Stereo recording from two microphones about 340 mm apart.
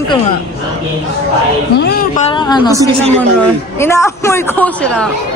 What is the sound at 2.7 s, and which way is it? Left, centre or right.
Speech, centre.